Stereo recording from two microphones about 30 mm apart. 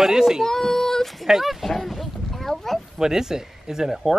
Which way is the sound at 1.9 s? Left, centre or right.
Centre.